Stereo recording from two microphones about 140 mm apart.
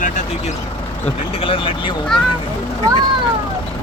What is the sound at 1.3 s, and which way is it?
Speech, 40° left (ahead or behind).